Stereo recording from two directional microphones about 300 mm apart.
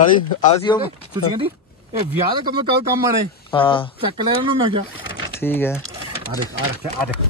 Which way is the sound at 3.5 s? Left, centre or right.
Centre.